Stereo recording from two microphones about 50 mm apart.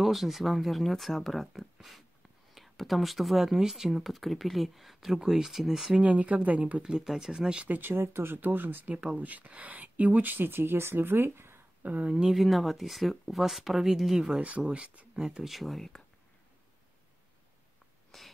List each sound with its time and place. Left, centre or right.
0.0 s speech: centre
5.9 s speech: right
6.8 s speech: centre
7.6 s speech: right
8.4 s speech: right
8.8 s speech: right
11.8 s speech: right
12.3 s speech: centre
14.7 s speech: right
15.1 s speech: centre
15.4 s speech: centre
18.1 s a sound: centre